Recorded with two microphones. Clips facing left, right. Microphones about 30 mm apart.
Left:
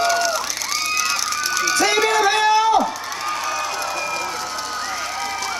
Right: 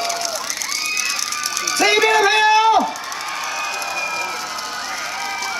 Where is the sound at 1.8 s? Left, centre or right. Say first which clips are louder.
Right 5 dB; centre.